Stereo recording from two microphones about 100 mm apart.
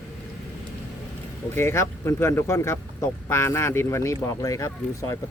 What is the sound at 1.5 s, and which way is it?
Speech, 25° left (ahead or behind).